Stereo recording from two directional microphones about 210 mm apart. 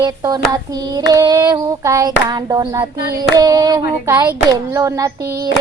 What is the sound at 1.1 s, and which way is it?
Child singing, 20° right (ahead or behind).